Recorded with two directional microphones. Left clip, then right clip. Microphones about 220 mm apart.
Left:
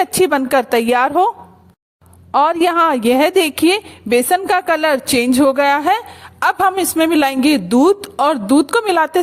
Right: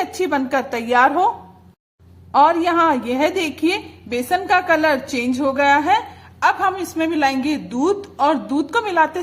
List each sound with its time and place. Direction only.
0.0 s a woman's voice: 40° left (ahead or behind)
2.3 s a woman's voice: 40° left (ahead or behind)